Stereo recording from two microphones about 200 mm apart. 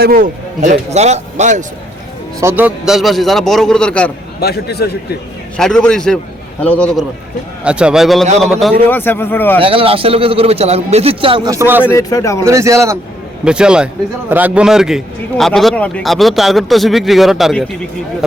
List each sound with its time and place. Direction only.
0.0 s speech: 45° right (ahead or behind)
2.4 s a man's voice: 10° right (ahead or behind); by 4.1 s 5° left (ahead or behind)
4.4 s a man's voice: 50° left (ahead or behind)
5.5 s a man's voice: centre (ahead or behind)
9.6 s speech: 25° right (ahead or behind); by 11.9 s 10° right (ahead or behind)
11.9 s speech: 15° left (ahead or behind)
12.5 s a man's voice: 15° right (ahead or behind)
13.4 s a man's voice: 5° right (ahead or behind)